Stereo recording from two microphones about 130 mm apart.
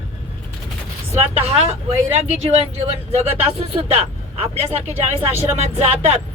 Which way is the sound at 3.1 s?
50° right (ahead or behind).